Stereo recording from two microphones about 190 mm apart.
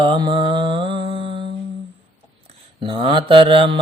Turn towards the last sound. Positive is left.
turn(degrees=-30)  # may be behind; listen again after turning